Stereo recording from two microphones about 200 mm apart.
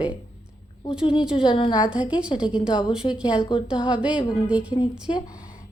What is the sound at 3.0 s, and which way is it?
Speech, 25° left (ahead or behind).